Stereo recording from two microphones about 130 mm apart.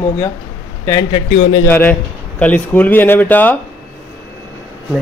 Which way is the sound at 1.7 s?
15° left (ahead or behind).